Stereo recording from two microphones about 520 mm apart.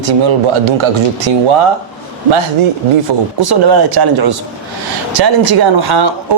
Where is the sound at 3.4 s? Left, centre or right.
Right.